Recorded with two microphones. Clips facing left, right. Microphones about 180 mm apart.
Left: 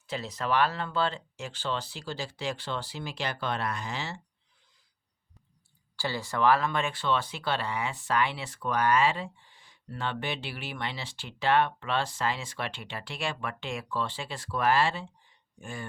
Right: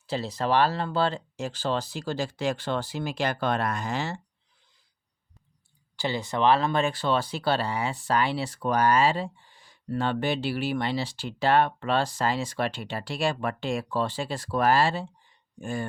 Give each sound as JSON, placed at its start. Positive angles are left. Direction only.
{"t": 0.1, "sound": "speech", "side_deg": -30}
{"t": 6.0, "sound": "speech", "side_deg": -20}